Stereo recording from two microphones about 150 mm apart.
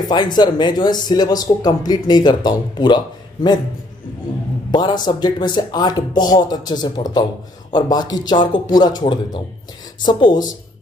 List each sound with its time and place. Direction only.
0.0 s speech: 30° left (ahead or behind)
4.6 s speech: 30° left (ahead or behind)